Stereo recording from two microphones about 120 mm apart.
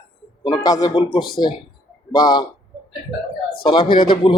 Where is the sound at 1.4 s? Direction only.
45° left (ahead or behind).